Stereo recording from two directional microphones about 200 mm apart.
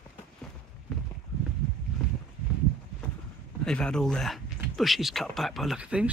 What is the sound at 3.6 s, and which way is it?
Speech, 5° left (ahead or behind).